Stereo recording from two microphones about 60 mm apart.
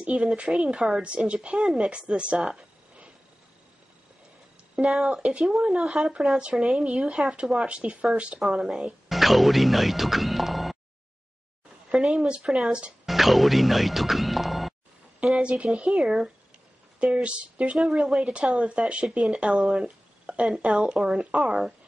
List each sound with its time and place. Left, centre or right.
0.0 s speech: centre
1.6 s speech: centre
4.7 s speech: centre
5.9 s speech: centre
9.1 s music: centre
11.9 s speech: centre
13.0 s speech: centre
15.3 s speech: centre